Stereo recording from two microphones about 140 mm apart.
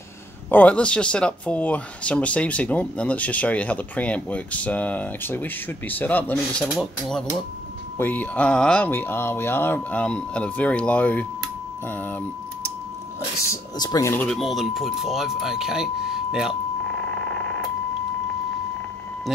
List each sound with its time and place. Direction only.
0.5 s speech: 10° left (ahead or behind)
8.0 s speech: 10° left (ahead or behind)
13.5 s speech: 25° left (ahead or behind)
14.1 s speech: 5° left (ahead or behind)